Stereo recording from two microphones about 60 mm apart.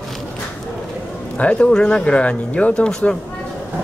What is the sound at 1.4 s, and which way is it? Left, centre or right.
Speech, centre.